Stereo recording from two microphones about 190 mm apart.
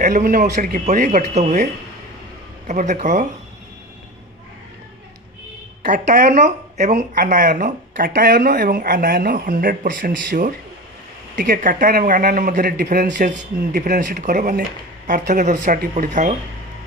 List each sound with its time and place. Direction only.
0.0 s speech: 45° right (ahead or behind)
5.9 s speech: 40° right (ahead or behind)